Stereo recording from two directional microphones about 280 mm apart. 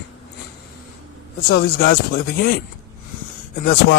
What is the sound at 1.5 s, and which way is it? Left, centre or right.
Speech, left.